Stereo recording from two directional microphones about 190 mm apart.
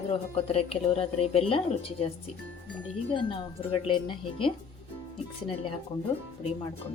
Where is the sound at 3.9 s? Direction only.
25° left (ahead or behind).